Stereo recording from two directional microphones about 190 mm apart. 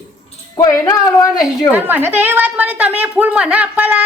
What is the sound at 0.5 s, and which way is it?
Speech, 20° left (ahead or behind).